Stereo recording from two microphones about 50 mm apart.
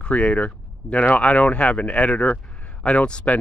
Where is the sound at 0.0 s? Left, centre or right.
Left.